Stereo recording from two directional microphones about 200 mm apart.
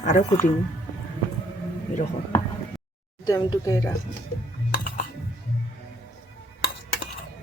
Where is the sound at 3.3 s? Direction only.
20° left (ahead or behind).